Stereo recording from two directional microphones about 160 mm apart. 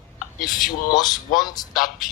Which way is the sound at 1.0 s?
25° left (ahead or behind).